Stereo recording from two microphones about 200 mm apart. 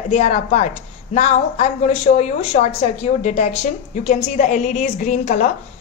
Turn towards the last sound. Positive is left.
turn(degrees=35)  # may be behind; listen again after turning